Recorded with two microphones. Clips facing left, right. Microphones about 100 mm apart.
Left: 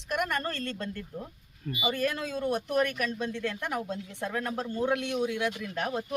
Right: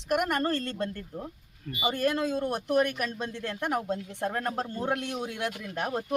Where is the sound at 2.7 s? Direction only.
30° right (ahead or behind).